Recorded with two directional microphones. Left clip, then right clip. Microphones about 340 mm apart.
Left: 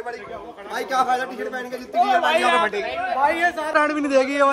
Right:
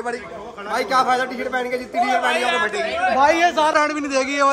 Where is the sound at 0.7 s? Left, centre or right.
Centre.